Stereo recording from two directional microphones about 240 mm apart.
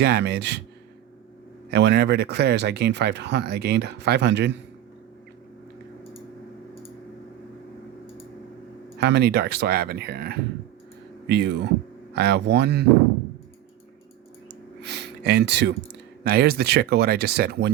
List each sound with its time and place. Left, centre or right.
0.0 s speech: right
1.7 s speech: right
9.0 s speech: right
14.8 s a sound: right
16.2 s speech: right